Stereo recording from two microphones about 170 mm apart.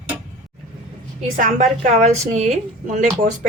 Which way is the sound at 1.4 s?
45° right (ahead or behind).